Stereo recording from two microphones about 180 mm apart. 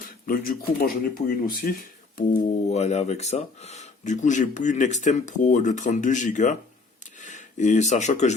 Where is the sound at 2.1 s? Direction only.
40° left (ahead or behind).